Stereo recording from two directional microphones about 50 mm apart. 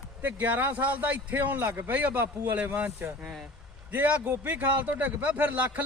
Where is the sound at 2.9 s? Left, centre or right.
Right.